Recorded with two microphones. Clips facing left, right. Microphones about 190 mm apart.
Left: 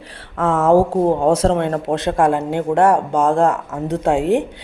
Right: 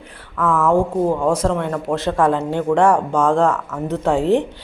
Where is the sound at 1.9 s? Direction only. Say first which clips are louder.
Left 1 dB; 35° left (ahead or behind).